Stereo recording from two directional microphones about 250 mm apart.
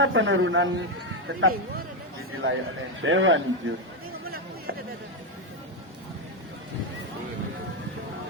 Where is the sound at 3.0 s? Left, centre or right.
Right.